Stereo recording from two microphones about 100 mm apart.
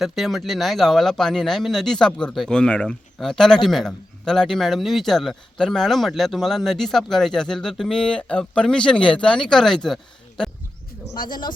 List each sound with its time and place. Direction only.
0.0 s a man's voice: centre (ahead or behind)
11.1 s speech: 50° left (ahead or behind)